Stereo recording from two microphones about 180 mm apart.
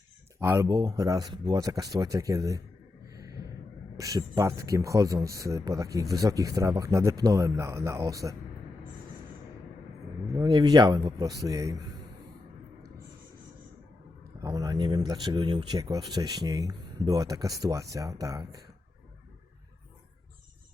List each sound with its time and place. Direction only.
0.3 s speech: 15° right (ahead or behind)
3.1 s a sound: 20° right (ahead or behind)
3.9 s speech: 20° right (ahead or behind)
10.3 s speech: 25° right (ahead or behind)
14.4 s speech: 20° right (ahead or behind)